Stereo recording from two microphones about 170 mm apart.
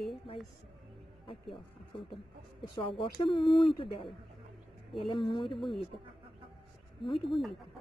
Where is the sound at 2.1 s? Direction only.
30° left (ahead or behind).